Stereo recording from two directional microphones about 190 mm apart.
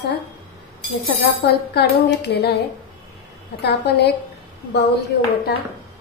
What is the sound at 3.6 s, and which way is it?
Speech, 60° left (ahead or behind).